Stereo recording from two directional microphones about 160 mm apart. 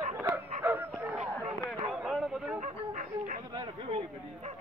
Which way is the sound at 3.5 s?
35° right (ahead or behind).